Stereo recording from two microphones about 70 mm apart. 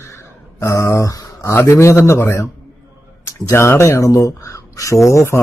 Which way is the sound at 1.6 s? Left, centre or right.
Left.